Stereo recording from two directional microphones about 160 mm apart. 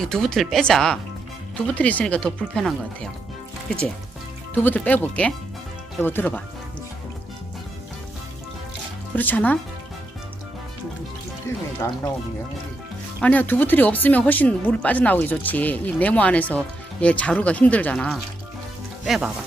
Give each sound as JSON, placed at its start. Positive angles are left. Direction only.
{"t": 0.0, "sound": "speech", "side_deg": 5}
{"t": 4.6, "sound": "speech", "side_deg": 10}
{"t": 9.1, "sound": "speech", "side_deg": 10}
{"t": 11.8, "sound": "speech", "side_deg": 20}
{"t": 13.1, "sound": "speech", "side_deg": 10}